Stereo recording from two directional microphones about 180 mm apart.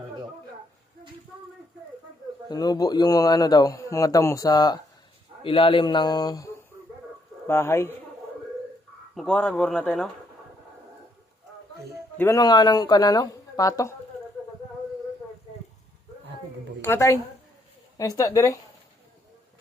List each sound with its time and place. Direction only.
2.5 s a man's voice: 20° left (ahead or behind)
9.1 s speech: 5° left (ahead or behind)
12.1 s a man's voice: 15° left (ahead or behind)
16.8 s speech: 15° left (ahead or behind)